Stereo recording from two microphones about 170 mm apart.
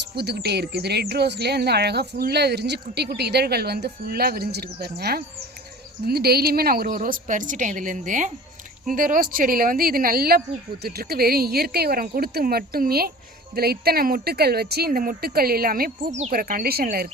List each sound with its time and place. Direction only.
0.2 s a woman's voice: 75° right (ahead or behind)